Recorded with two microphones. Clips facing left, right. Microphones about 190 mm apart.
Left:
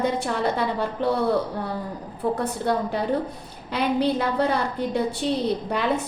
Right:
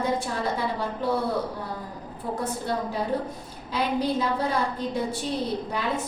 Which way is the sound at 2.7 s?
65° left (ahead or behind).